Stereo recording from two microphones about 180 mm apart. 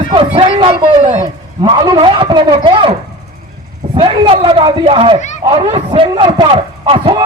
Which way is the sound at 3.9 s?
25° right (ahead or behind).